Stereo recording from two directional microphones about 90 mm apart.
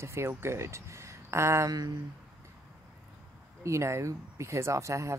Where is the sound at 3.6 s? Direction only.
35° right (ahead or behind).